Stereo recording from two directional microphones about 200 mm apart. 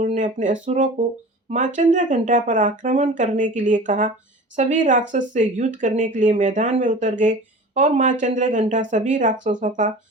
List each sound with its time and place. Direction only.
0.0 s speech: 35° right (ahead or behind)